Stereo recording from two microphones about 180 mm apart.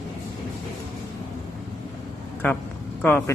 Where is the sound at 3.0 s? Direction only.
10° left (ahead or behind).